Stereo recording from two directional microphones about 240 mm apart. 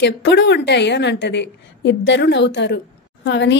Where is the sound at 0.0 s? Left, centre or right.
Left.